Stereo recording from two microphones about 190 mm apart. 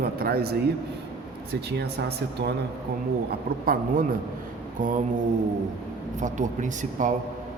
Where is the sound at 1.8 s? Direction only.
60° right (ahead or behind).